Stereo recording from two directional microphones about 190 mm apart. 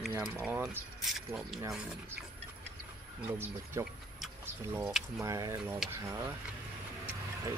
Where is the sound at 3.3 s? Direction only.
15° right (ahead or behind).